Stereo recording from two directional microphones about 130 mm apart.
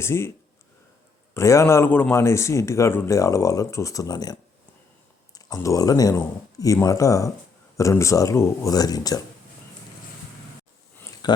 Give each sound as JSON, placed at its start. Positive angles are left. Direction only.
{"t": 0.0, "sound": "a man's voice", "side_deg": 20}
{"t": 1.3, "sound": "a man's voice", "side_deg": 25}
{"t": 5.5, "sound": "a man's voice", "side_deg": 25}
{"t": 11.2, "sound": "a sound", "side_deg": 30}